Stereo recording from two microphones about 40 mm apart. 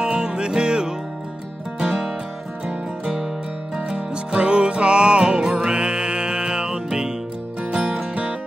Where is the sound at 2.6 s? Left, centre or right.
Right.